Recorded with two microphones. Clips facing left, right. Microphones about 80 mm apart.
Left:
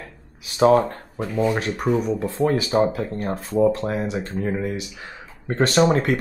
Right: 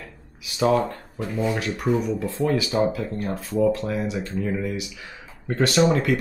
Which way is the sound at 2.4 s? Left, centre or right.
Left.